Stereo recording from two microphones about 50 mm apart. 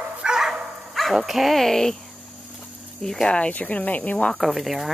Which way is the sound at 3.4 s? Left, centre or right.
Left.